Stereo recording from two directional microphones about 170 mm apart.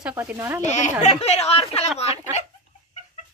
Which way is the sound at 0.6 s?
45° left (ahead or behind).